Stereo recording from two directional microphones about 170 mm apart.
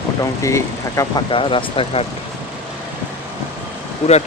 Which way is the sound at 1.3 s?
30° left (ahead or behind).